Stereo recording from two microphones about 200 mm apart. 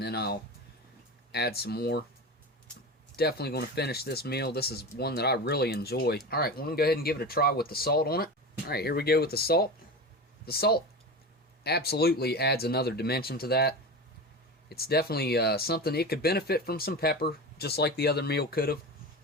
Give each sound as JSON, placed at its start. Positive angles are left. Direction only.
{"t": 0.0, "sound": "speech", "side_deg": 55}
{"t": 3.2, "sound": "speech", "side_deg": 55}